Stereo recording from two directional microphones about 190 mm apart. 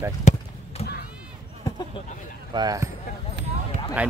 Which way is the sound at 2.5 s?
20° right (ahead or behind).